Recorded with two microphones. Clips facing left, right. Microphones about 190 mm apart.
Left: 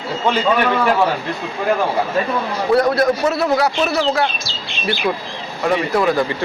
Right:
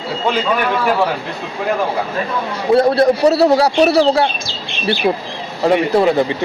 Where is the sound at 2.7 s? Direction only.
30° right (ahead or behind).